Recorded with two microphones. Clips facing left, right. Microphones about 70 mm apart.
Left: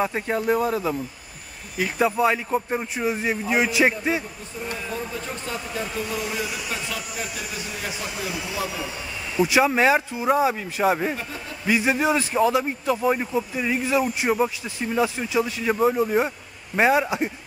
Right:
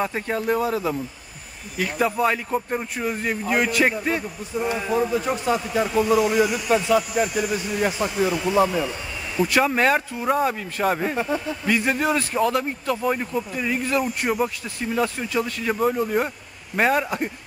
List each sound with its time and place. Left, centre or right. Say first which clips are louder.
0.0 s a man's voice: left 1 dB; centre
4.6 s speech: right 8 dB; right
6.0 s a man's voice: right 10 dB; centre